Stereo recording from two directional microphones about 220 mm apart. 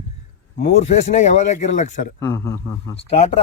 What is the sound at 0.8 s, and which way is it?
A man's voice, 30° left (ahead or behind).